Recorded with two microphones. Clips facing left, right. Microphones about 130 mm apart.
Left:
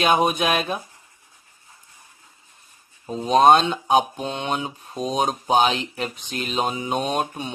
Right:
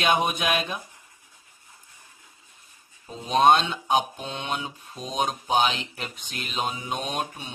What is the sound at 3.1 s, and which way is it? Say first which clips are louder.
Speech: left 4 dB; 40° left (ahead or behind).